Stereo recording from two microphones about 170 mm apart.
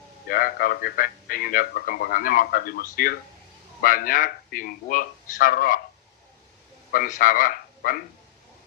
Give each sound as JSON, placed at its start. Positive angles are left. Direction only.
{"t": 0.3, "sound": "speech", "side_deg": 55}
{"t": 6.9, "sound": "a man's voice", "side_deg": 55}